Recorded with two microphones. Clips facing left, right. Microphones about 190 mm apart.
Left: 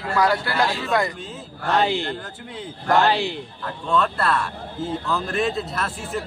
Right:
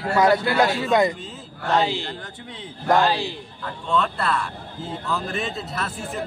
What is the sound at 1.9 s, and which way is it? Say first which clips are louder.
Speech: left 4 dB; 60° left (ahead or behind).